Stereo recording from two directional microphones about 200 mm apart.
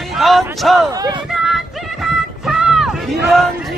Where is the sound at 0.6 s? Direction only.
Centre (ahead or behind).